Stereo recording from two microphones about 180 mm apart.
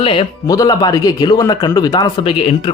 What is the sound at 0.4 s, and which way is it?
Speech, 20° left (ahead or behind).